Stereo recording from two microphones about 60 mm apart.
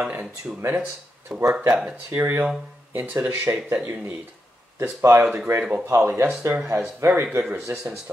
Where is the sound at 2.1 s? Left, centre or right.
Right.